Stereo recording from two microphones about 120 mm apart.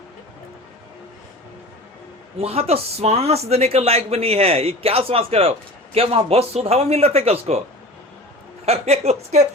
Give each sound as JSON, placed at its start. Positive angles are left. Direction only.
{"t": 2.4, "sound": "speech", "side_deg": -55}
{"t": 8.6, "sound": "speech", "side_deg": -60}